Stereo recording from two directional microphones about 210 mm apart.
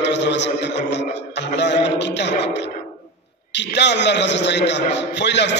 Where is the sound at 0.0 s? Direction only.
55° left (ahead or behind).